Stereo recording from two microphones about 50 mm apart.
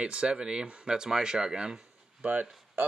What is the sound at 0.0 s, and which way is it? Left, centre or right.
Speech, right.